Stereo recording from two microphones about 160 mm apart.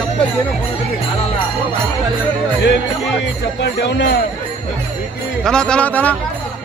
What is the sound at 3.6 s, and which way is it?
Speech, 90° left.